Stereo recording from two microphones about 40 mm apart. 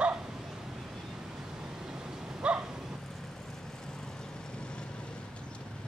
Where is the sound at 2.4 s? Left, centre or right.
Right.